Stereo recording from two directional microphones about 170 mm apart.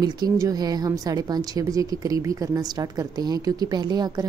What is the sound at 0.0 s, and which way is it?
A woman's voice, 25° right (ahead or behind).